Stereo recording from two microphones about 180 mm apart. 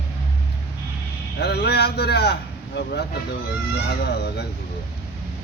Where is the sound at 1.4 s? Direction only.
65° left (ahead or behind).